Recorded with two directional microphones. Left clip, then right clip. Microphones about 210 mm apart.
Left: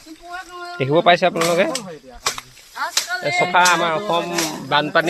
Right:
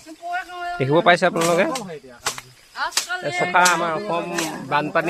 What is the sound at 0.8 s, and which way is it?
Speech, 10° right (ahead or behind).